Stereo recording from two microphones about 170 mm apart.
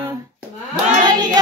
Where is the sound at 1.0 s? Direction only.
25° right (ahead or behind).